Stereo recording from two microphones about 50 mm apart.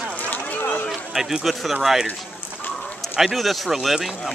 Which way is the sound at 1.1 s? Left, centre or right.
Centre.